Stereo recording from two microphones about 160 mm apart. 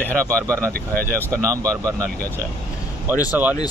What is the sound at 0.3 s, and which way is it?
Speech, 20° right (ahead or behind).